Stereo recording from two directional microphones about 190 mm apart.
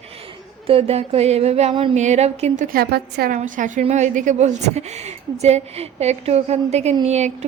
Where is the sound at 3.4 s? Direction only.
45° right (ahead or behind).